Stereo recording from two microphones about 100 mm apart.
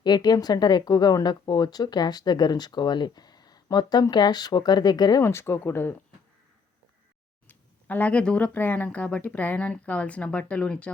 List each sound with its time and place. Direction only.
0.0 s speech: 45° left (ahead or behind)
5.2 s speech: 25° left (ahead or behind)
7.4 s speech: 15° left (ahead or behind)